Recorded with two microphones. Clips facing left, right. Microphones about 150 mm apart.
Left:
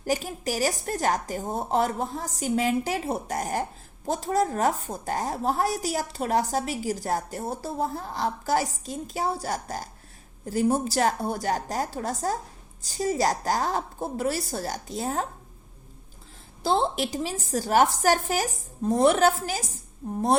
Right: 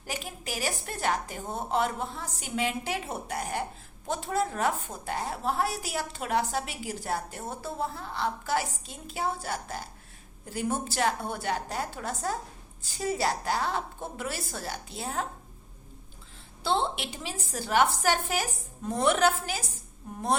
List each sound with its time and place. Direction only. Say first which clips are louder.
0.0 s a woman's voice: left 10 dB; 40° left (ahead or behind)
16.6 s a woman's voice: left 4 dB; 40° left (ahead or behind)